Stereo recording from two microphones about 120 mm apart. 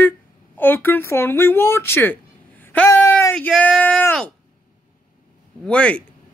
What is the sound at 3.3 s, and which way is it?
Speech, 10° left (ahead or behind).